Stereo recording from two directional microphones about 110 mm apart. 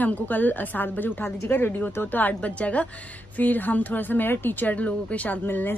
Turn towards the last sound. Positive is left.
turn(degrees=20)  # may be behind; listen again after turning